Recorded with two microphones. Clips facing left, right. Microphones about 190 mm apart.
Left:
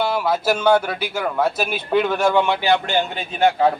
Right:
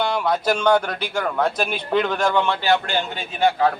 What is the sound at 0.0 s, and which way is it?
A man's voice, 5° left (ahead or behind).